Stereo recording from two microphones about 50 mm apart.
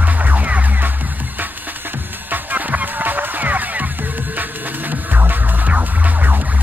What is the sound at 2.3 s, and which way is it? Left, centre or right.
Music, right.